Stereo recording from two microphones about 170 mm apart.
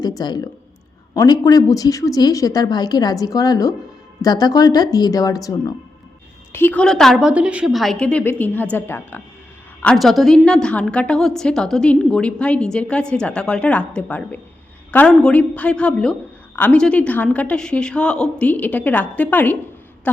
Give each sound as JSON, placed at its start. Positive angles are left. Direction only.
{"t": 0.2, "sound": "a woman's voice", "side_deg": 25}